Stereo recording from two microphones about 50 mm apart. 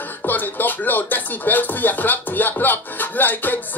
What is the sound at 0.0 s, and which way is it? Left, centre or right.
Speech, left.